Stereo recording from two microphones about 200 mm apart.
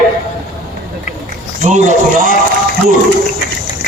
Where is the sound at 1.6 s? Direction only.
40° right (ahead or behind).